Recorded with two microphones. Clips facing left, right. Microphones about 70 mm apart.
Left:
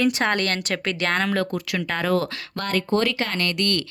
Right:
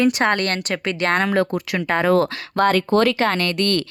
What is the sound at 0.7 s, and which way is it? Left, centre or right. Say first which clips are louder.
Speech: right 3 dB; centre.